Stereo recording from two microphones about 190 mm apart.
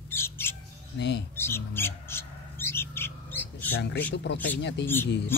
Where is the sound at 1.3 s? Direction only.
10° left (ahead or behind).